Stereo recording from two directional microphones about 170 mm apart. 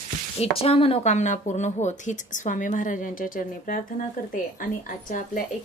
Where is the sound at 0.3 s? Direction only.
35° left (ahead or behind).